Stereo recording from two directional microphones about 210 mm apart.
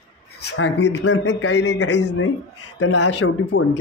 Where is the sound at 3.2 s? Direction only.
55° left (ahead or behind).